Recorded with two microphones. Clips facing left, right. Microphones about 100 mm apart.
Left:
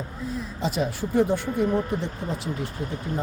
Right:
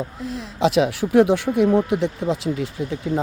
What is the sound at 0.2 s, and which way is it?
Speech, 85° right.